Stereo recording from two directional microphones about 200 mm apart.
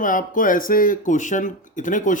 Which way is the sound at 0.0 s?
40° left (ahead or behind).